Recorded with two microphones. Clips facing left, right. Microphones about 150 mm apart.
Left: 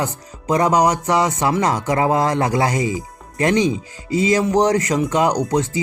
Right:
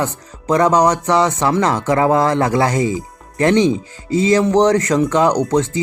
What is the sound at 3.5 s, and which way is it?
Speech, 30° right (ahead or behind).